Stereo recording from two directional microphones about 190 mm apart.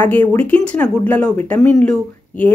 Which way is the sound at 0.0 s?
10° left (ahead or behind).